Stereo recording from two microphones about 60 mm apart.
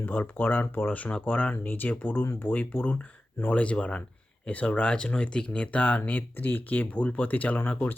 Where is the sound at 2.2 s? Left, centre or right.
Left.